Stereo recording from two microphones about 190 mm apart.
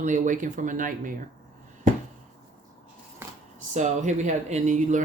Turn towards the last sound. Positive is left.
turn(degrees=-40)  # may be behind; listen again after turning